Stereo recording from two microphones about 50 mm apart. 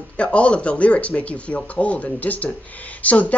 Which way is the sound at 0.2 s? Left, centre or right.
Left.